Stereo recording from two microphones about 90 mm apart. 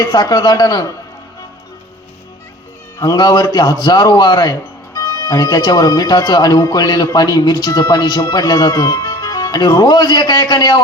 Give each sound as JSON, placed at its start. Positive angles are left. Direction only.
{"t": 0.0, "sound": "speech", "side_deg": 45}
{"t": 3.0, "sound": "speech", "side_deg": 45}